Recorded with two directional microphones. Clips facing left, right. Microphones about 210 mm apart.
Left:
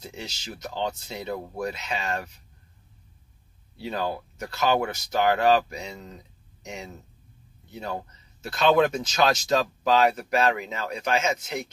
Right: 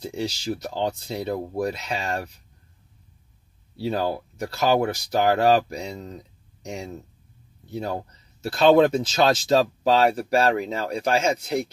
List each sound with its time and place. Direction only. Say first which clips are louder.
0.0 s speech: right 10 dB; 35° right (ahead or behind)
3.7 s speech: right 4 dB; 35° right (ahead or behind)